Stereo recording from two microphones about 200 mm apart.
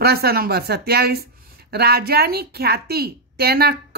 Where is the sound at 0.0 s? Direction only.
50° right (ahead or behind).